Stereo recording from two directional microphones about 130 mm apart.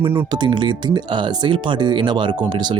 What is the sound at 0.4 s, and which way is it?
Speech, 35° right (ahead or behind).